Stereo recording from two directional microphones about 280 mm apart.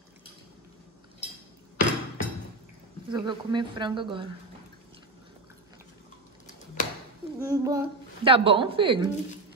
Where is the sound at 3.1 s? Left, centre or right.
Centre.